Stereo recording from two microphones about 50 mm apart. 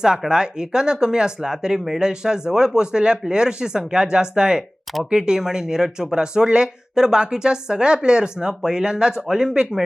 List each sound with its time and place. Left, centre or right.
0.3 s speech: centre